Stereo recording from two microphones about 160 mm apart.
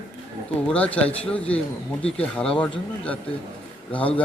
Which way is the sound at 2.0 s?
40° left (ahead or behind).